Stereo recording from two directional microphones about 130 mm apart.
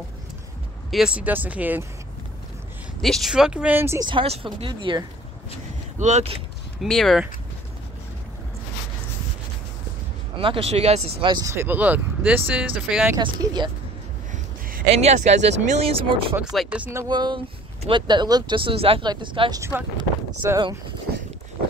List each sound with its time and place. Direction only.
0.9 s speech: 5° right (ahead or behind)
3.0 s speech: centre (ahead or behind); by 4.0 s 15° right (ahead or behind)
4.0 s speech: 40° right (ahead or behind)
5.9 s speech: 65° right (ahead or behind)
6.8 s speech: centre (ahead or behind)
10.4 s speech: 45° right (ahead or behind)
11.3 s speech: 20° right (ahead or behind)
13.2 s speech: 35° right (ahead or behind)
14.9 s speech: 55° right (ahead or behind)
16.5 s speech: 10° right (ahead or behind)
17.1 s speech: 35° right (ahead or behind)
20.4 s speech: 20° right (ahead or behind)